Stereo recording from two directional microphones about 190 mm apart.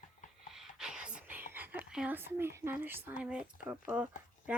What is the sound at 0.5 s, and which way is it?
Whispering, centre (ahead or behind).